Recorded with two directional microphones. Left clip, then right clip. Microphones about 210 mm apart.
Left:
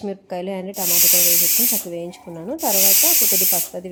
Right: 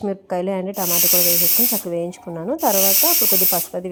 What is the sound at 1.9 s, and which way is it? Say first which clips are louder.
Speech: right 5 dB; 15° right (ahead or behind).